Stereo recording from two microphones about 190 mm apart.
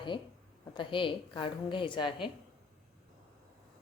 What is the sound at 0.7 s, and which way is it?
A woman's voice, 25° left (ahead or behind).